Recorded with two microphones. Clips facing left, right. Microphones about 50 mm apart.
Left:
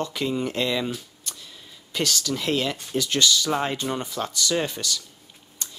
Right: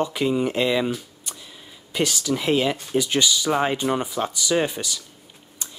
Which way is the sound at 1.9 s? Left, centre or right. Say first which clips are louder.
Right 3 dB; centre.